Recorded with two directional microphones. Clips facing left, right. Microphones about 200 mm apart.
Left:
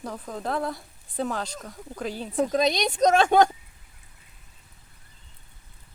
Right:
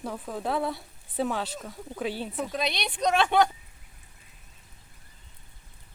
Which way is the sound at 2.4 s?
40° left (ahead or behind).